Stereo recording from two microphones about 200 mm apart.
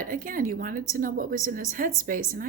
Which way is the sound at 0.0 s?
45° right (ahead or behind).